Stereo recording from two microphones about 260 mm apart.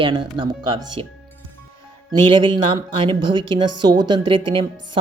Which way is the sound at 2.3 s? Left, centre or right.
Centre.